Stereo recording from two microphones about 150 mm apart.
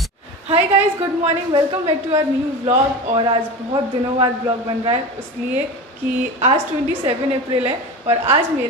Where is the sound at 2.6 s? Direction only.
45° right (ahead or behind).